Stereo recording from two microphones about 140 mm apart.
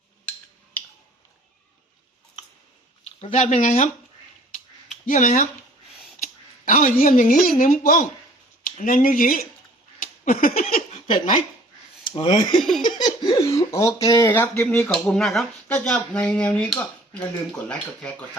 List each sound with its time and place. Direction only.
3.2 s speech: 50° left (ahead or behind)
5.0 s speech: 65° left (ahead or behind); by 8.0 s 85° left
8.6 s speech: 70° left (ahead or behind)
10.0 s a sound: 80° left
10.6 s a sound: 50° left (ahead or behind)
12.0 s speech: 35° left (ahead or behind)
12.5 s laughter: centre (ahead or behind)
12.8 s speech: 30° left (ahead or behind); by 18.3 s 10° left (ahead or behind)